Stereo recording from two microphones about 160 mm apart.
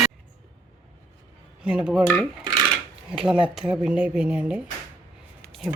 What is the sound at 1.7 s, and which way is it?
Speech, 5° right (ahead or behind).